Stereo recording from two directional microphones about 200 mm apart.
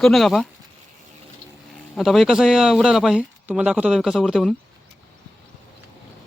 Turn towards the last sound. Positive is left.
turn(degrees=0)  # may be behind; listen again after turning